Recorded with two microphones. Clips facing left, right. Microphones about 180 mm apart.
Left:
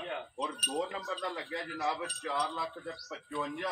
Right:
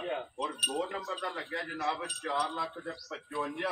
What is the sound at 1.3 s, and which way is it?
Speech, 15° left (ahead or behind).